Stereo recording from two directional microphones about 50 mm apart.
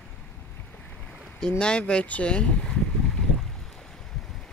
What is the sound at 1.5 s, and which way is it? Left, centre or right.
Speech, left.